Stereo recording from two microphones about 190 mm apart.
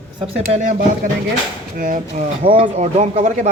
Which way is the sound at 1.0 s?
45° right (ahead or behind).